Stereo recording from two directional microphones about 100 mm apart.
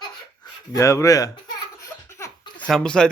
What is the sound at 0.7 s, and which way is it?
Speech, 30° left (ahead or behind).